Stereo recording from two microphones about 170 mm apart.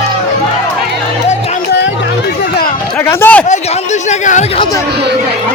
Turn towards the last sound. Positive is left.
turn(degrees=45)  # may be behind; listen again after turning